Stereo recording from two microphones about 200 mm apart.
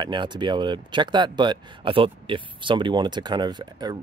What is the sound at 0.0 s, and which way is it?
Speech, 25° right (ahead or behind).